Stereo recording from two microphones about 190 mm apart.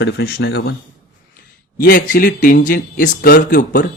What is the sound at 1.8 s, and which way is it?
Speech, 45° left (ahead or behind).